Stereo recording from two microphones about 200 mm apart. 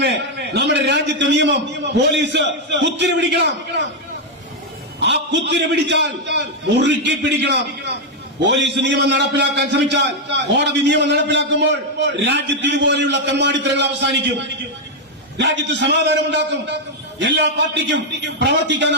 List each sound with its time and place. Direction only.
0.0 s a man's voice: 60° right (ahead or behind)
4.9 s a man's voice: 60° right (ahead or behind)
15.4 s a man's voice: 60° right (ahead or behind)